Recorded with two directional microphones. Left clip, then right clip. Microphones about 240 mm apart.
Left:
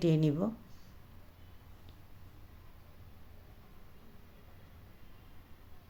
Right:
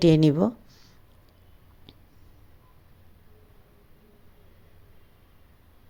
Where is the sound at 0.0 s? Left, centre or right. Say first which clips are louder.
Right 11 dB; right.